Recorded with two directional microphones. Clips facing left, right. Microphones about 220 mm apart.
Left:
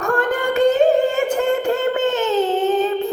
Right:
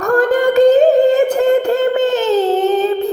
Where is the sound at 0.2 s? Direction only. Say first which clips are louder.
Right 8 dB; 35° right (ahead or behind).